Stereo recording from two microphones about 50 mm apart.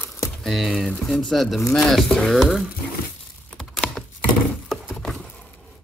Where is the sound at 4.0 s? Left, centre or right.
Left.